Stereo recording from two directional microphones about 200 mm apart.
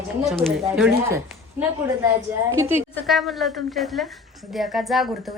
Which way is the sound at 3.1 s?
Centre (ahead or behind).